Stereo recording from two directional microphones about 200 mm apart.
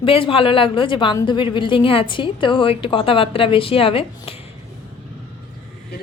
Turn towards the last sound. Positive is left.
turn(degrees=30)  # may be behind; listen again after turning